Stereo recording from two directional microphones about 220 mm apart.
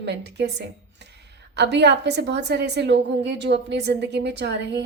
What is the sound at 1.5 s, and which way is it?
A woman's voice, 50° right (ahead or behind).